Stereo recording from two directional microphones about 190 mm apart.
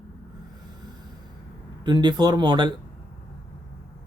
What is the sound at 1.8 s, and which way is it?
Speech, 25° right (ahead or behind).